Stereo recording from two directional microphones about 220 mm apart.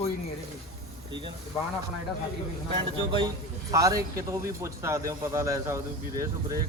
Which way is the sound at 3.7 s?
15° right (ahead or behind).